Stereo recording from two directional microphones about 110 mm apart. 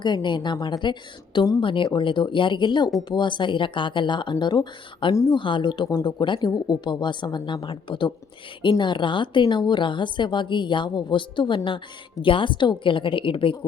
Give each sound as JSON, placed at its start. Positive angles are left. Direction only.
{"t": 0.0, "sound": "a woman's voice", "side_deg": 45}